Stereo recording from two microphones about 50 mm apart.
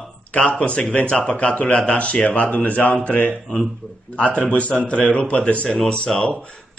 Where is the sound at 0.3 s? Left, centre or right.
Left.